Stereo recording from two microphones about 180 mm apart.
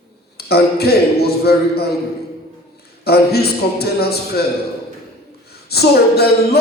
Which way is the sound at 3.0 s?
60° left (ahead or behind).